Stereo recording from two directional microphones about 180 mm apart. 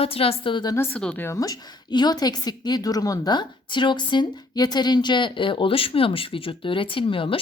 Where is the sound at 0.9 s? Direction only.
10° left (ahead or behind).